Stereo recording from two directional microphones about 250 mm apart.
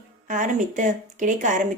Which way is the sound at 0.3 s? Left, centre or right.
Right.